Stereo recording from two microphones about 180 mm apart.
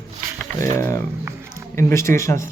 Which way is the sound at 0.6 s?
15° left (ahead or behind).